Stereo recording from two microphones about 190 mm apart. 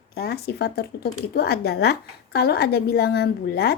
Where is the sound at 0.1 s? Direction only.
55° left (ahead or behind).